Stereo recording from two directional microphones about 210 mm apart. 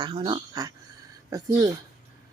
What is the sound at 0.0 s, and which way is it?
A woman's voice, 25° right (ahead or behind).